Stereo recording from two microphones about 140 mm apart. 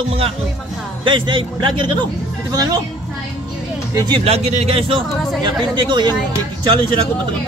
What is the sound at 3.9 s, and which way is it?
Speech, 25° right (ahead or behind).